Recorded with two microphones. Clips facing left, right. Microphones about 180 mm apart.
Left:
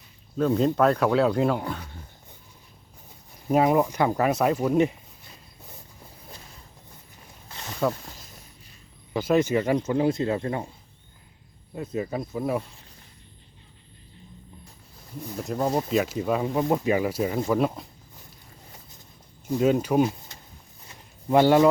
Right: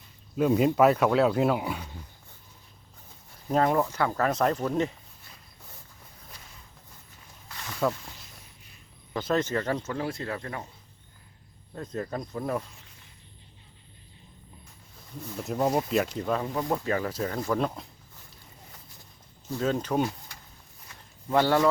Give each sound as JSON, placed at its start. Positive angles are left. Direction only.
{"t": 0.3, "sound": "speech", "side_deg": -10}
{"t": 3.5, "sound": "speech", "side_deg": 10}
{"t": 7.4, "sound": "a sound", "side_deg": 25}
{"t": 9.1, "sound": "speech", "side_deg": 10}
{"t": 11.7, "sound": "speech", "side_deg": 10}
{"t": 15.4, "sound": "speech", "side_deg": 0}
{"t": 16.6, "sound": "speech", "side_deg": 20}
{"t": 19.5, "sound": "speech", "side_deg": 15}
{"t": 20.1, "sound": "a sound", "side_deg": 20}